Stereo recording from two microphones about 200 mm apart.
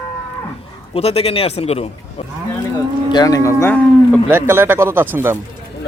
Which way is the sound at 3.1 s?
20° left (ahead or behind).